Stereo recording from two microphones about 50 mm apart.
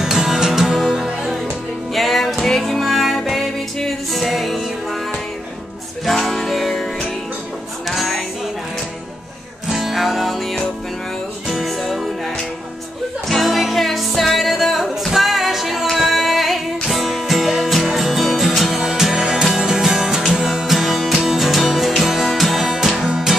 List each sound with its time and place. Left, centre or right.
0.0 s music: centre
6.0 s music: centre
9.7 s music: centre
13.3 s music: centre
22.9 s music: centre